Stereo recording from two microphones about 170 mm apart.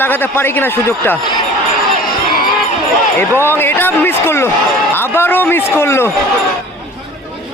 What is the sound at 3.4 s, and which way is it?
A man's voice, 10° left (ahead or behind).